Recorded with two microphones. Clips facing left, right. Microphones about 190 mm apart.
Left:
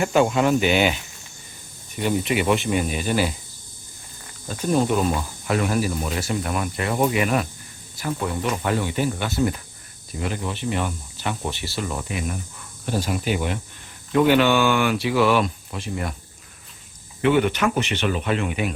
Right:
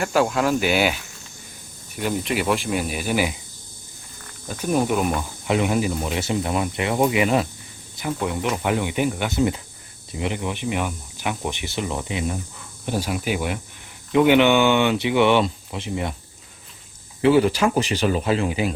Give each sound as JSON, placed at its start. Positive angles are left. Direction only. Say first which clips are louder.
{"t": 0.0, "sound": "speech", "louder": "left 2 dB", "side_deg": 0}
{"t": 2.0, "sound": "speech", "louder": "left 2 dB", "side_deg": 0}
{"t": 4.4, "sound": "speech", "louder": "left 1 dB", "side_deg": -10}
{"t": 12.8, "sound": "speech", "louder": "even", "side_deg": -10}
{"t": 17.2, "sound": "speech", "louder": "right 2 dB", "side_deg": -30}